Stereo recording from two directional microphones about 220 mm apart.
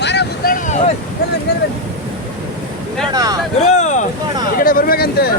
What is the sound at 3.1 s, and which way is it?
Speech, 15° right (ahead or behind).